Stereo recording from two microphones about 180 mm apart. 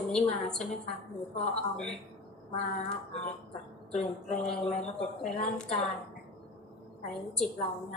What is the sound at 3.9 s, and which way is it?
Speech, 40° left (ahead or behind).